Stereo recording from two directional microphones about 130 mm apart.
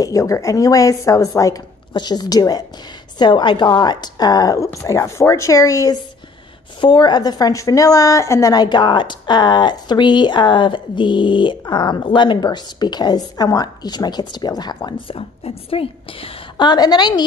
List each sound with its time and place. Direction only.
0.0 s a woman's voice: 25° left (ahead or behind)